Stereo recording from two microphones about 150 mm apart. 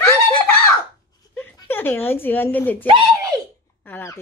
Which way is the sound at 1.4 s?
15° left (ahead or behind).